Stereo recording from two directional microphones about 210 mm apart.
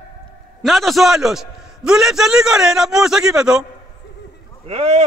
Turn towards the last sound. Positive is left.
turn(degrees=-30)  # may be behind; listen again after turning